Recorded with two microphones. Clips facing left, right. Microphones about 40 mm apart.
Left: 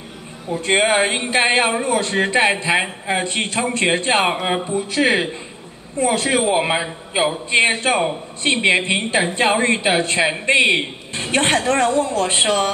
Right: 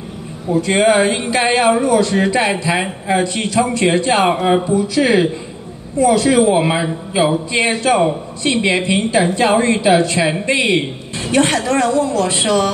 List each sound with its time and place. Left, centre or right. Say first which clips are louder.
0.6 s a woman's voice: right 4 dB; left